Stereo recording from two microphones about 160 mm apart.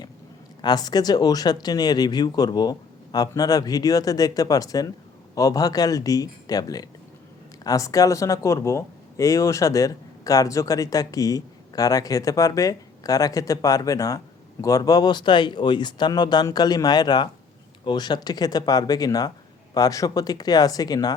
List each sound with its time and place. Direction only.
0.6 s speech: 25° left (ahead or behind)